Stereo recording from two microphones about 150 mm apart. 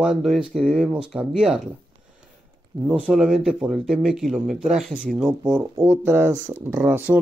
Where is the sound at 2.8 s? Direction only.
5° right (ahead or behind).